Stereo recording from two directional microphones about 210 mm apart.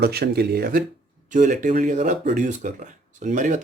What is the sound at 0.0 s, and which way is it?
Speech, 50° right (ahead or behind).